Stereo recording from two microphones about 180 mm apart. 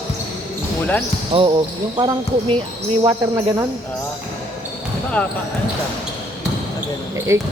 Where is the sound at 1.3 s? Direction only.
30° right (ahead or behind).